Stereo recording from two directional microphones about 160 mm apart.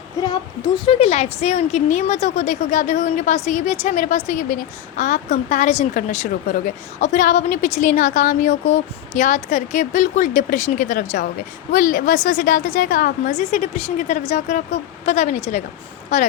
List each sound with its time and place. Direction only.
0.9 s a woman's voice: 40° left (ahead or behind)